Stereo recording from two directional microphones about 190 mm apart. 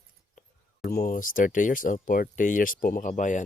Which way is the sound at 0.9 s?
50° left (ahead or behind).